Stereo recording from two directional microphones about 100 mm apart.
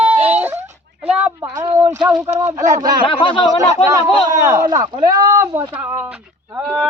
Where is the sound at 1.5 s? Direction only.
35° right (ahead or behind).